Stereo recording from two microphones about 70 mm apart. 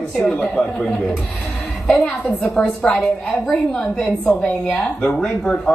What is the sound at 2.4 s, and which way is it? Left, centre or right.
Speech, centre.